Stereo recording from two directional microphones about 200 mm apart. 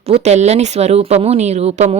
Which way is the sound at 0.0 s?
35° right (ahead or behind).